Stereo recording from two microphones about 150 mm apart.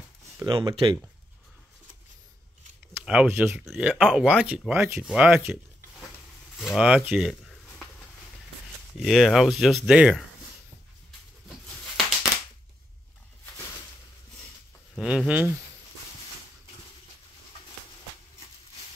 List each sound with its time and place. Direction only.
0.5 s speech: 35° right (ahead or behind)
3.0 s speech: 10° right (ahead or behind)
3.6 s speech: centre (ahead or behind)
4.5 s speech: 15° right (ahead or behind)
9.0 s speech: centre (ahead or behind)
15.0 s speech: 5° right (ahead or behind)